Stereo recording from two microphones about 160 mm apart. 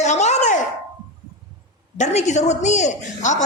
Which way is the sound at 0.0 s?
45° left (ahead or behind).